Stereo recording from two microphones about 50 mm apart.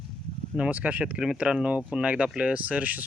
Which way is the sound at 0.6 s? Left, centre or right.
Right.